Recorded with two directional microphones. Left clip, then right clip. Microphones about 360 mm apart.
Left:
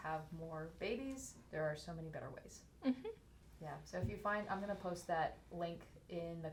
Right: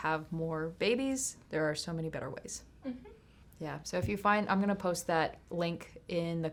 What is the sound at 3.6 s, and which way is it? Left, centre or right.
Speech, right.